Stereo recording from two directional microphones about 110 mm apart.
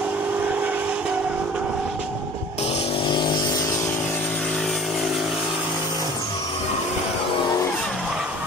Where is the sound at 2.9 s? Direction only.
45° left (ahead or behind).